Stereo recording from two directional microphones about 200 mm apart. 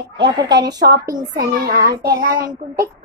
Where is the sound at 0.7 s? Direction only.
55° right (ahead or behind).